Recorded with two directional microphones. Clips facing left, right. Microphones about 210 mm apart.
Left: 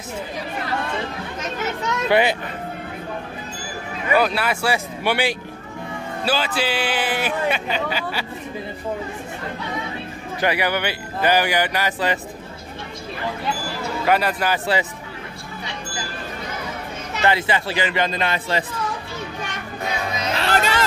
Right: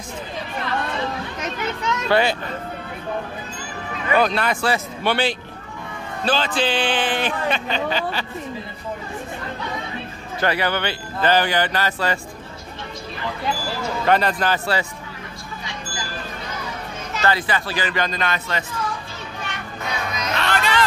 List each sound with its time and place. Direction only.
2.0 s speech: 15° left (ahead or behind)
4.2 s speech: 5° left (ahead or behind)
10.4 s speech: 15° left (ahead or behind)
14.0 s speech: 10° left (ahead or behind)
17.2 s speech: 25° left (ahead or behind)
19.8 s music: 30° left (ahead or behind)